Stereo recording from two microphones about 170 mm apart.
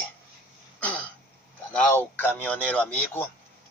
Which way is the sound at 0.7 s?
5° left (ahead or behind).